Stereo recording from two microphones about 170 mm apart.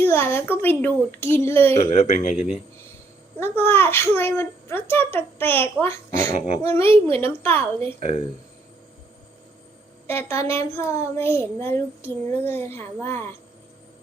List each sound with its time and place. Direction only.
0.0 s child singing: 10° left (ahead or behind)
1.9 s speech: 40° left (ahead or behind)
2.3 s speech: 5° right (ahead or behind)
3.4 s child singing: 15° left (ahead or behind)
7.9 s speech: 35° left (ahead or behind)
10.1 s child singing: 15° left (ahead or behind)